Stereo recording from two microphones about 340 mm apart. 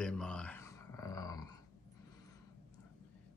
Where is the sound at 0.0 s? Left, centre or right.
Centre.